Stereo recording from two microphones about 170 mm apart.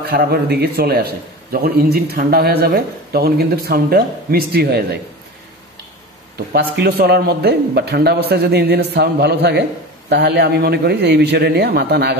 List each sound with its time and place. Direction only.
0.1 s a man's voice: 65° right (ahead or behind)
6.3 s a man's voice: 65° right (ahead or behind)